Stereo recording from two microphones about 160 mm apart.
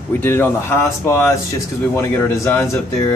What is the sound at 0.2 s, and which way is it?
Speech, 15° left (ahead or behind).